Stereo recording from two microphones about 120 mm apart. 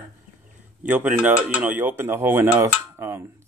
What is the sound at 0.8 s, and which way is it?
Speech, 15° right (ahead or behind).